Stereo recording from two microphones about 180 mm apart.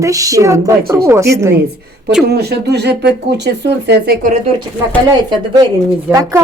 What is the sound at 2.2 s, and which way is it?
Speech, 65° right (ahead or behind).